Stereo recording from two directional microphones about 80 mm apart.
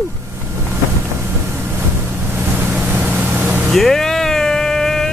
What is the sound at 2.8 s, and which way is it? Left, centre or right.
Vehicle, centre.